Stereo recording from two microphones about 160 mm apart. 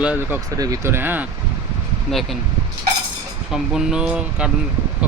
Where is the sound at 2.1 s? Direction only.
Centre (ahead or behind).